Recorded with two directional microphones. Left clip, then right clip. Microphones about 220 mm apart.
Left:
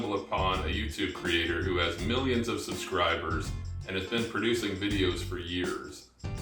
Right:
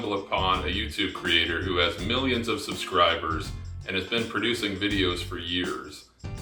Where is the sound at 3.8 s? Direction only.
15° right (ahead or behind).